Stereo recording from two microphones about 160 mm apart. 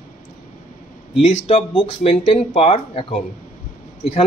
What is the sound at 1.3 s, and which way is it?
Speech, 45° left (ahead or behind).